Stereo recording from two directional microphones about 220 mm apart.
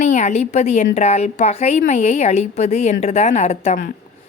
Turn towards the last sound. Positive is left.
turn(degrees=30)  # may be behind; listen again after turning